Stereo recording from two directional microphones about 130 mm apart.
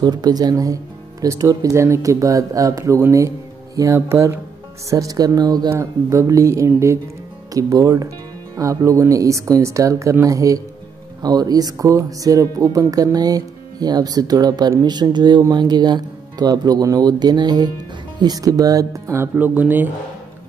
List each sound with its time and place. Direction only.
0.0 s speech: 30° right (ahead or behind); by 19.9 s 15° right (ahead or behind)